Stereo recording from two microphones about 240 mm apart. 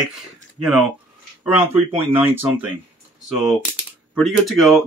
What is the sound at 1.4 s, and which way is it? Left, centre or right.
Speech, centre.